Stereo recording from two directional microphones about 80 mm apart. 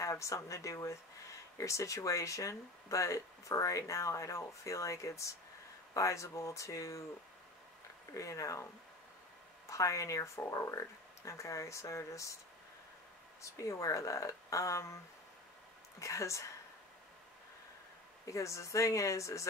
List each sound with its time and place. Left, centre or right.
0.0 s speech: left
8.1 s speech: left
9.7 s speech: left
13.4 s speech: left
16.0 s speech: left
18.2 s speech: left